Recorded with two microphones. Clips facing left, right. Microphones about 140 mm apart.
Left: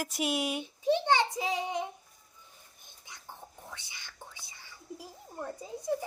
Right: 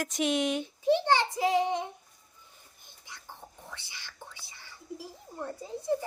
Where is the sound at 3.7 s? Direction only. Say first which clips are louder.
Right 1 dB; 15° left (ahead or behind).